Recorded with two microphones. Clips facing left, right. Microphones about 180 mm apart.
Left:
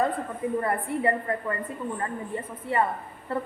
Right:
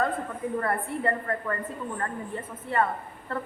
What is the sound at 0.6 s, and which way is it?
Speech, 15° left (ahead or behind).